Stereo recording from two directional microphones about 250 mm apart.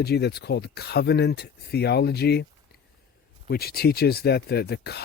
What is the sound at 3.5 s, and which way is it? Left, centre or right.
Speech, left.